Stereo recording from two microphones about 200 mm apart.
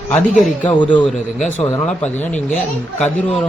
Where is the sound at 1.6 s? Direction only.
10° left (ahead or behind).